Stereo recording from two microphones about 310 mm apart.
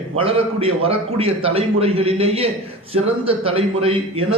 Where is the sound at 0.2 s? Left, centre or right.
Centre.